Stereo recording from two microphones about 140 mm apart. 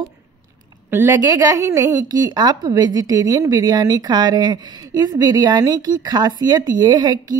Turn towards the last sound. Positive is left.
turn(degrees=-30)  # may be behind; listen again after turning